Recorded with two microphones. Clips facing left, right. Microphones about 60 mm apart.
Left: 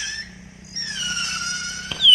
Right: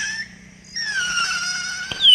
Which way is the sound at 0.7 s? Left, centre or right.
Right.